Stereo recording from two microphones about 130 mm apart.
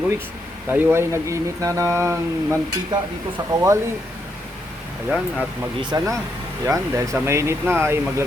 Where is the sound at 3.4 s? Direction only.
30° right (ahead or behind).